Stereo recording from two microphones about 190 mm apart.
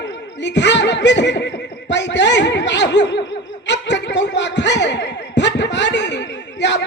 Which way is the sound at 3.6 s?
65° left (ahead or behind).